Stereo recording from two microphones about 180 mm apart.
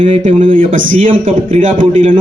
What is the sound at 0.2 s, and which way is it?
Speech, 40° right (ahead or behind).